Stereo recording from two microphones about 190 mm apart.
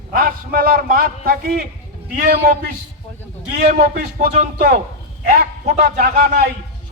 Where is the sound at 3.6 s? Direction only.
55° right (ahead or behind).